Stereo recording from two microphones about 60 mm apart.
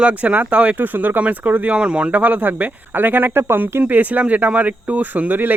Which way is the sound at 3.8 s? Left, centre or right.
Right.